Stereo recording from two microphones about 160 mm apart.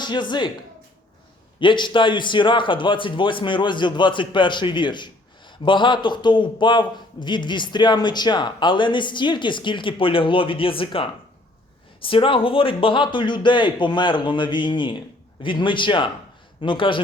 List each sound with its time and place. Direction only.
0.0 s a man's voice: 30° left (ahead or behind)
1.5 s a man's voice: 30° left (ahead or behind)